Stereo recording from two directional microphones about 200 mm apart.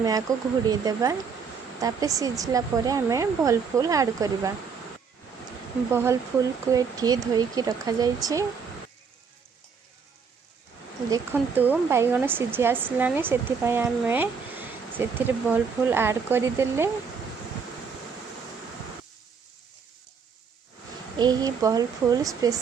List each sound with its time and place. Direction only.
0.0 s speech: 20° right (ahead or behind)
5.9 s speech: 15° right (ahead or behind)
11.1 s speech: 10° right (ahead or behind)
21.2 s speech: 20° right (ahead or behind)